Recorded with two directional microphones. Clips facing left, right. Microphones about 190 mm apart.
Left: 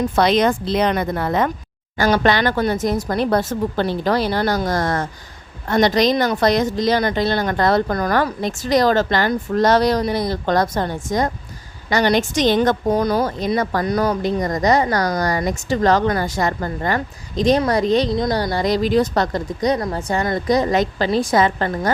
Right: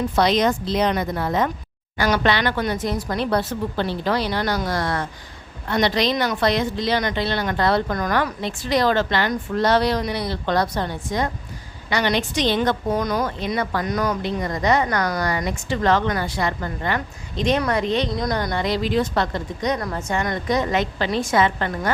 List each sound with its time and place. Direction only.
0.2 s a woman's voice: 55° left (ahead or behind)
2.0 s a woman's voice: 45° left (ahead or behind)
18.2 s a woman's voice: 25° left (ahead or behind)